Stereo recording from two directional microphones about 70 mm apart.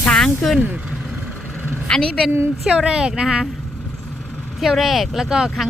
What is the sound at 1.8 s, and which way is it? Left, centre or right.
Speech, centre.